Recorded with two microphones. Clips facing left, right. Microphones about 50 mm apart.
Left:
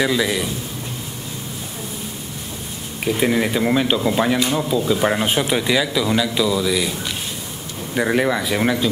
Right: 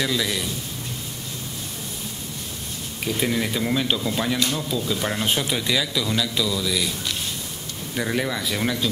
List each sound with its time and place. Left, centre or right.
0.0 s a man's voice: centre
3.1 s speech: left